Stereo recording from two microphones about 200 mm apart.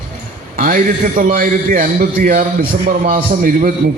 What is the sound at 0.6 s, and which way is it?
A man's voice, 40° right (ahead or behind).